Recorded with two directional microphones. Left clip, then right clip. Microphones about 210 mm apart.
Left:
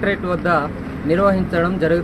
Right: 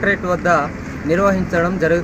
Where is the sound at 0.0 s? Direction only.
5° left (ahead or behind).